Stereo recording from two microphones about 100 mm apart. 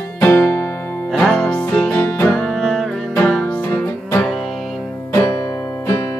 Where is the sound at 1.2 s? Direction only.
5° left (ahead or behind).